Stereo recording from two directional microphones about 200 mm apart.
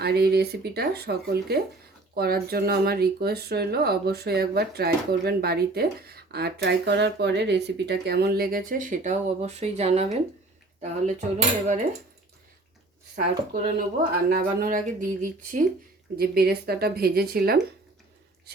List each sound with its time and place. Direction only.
0.0 s speech: 55° right (ahead or behind); by 10.2 s 30° right (ahead or behind)
10.8 s cutlery: 35° right (ahead or behind)
13.1 s speech: 45° right (ahead or behind)
16.1 s speech: 50° right (ahead or behind)